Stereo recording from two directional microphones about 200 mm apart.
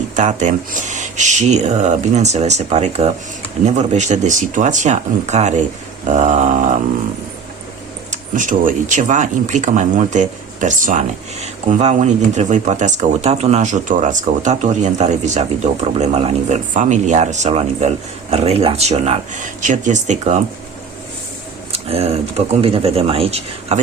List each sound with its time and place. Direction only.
0.2 s speech: 35° right (ahead or behind)
8.1 s speech: 40° right (ahead or behind)
21.7 s speech: 30° right (ahead or behind)